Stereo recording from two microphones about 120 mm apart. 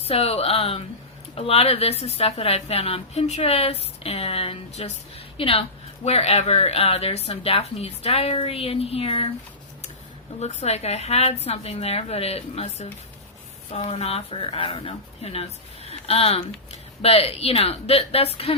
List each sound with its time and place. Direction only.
0.0 s speech: 55° left (ahead or behind)
10.4 s speech: 65° left (ahead or behind)